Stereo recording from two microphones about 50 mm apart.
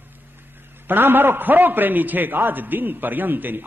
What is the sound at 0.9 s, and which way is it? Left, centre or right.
A man's voice, right.